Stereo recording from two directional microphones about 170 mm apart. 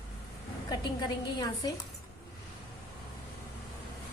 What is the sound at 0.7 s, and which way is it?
A woman's voice, 25° left (ahead or behind).